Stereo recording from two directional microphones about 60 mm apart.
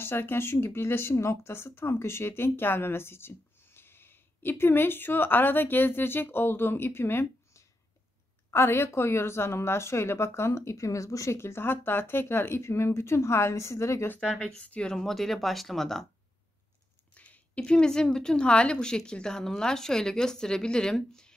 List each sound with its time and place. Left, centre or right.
0.0 s speech: left
8.5 s a woman's voice: left
14.4 s a woman's voice: centre
15.0 s speech: centre
17.1 s a sound: left
17.6 s a woman's voice: centre